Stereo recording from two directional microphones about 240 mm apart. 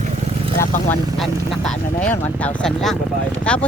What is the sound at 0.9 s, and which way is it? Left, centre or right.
Speech, centre.